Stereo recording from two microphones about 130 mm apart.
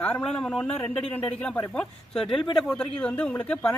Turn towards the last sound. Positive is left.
turn(degrees=10)  # may be behind; listen again after turning